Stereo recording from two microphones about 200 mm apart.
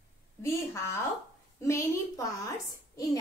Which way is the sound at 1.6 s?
15° left (ahead or behind).